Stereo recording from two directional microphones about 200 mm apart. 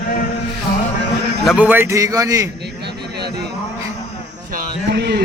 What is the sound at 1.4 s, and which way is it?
A man's voice, 5° right (ahead or behind).